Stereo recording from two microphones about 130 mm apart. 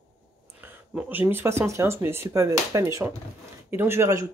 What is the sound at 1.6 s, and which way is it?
Speech, 20° right (ahead or behind).